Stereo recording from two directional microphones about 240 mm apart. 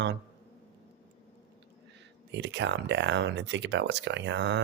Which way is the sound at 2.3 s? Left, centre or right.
Right.